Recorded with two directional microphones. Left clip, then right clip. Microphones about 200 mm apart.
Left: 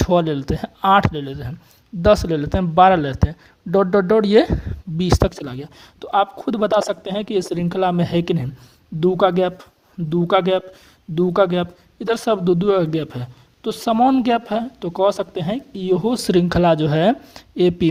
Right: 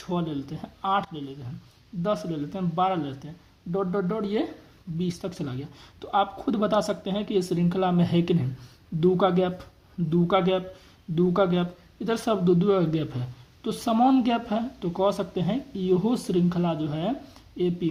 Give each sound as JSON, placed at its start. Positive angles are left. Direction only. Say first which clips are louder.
{"t": 0.1, "sound": "speech", "louder": "left 10 dB", "side_deg": 45}